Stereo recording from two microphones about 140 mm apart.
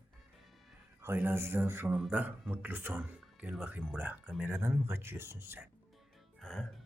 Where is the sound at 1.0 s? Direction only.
15° right (ahead or behind).